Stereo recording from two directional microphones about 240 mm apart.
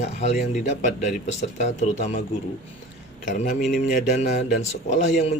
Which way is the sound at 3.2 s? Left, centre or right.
Left.